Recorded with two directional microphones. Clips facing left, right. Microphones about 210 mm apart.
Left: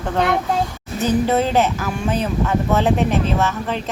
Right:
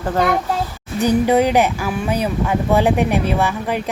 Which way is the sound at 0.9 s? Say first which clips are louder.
Right 3 dB; 15° right (ahead or behind).